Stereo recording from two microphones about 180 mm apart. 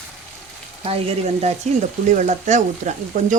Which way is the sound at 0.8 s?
35° right (ahead or behind).